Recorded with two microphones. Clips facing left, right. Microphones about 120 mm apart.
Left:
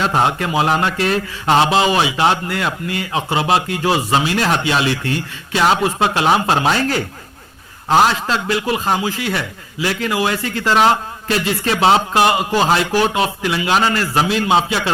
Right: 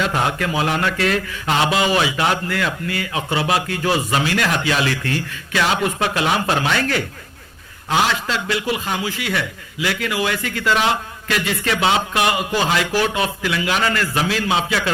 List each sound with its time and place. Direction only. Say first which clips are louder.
0.0 s a man's voice: left 3 dB; 30° left (ahead or behind)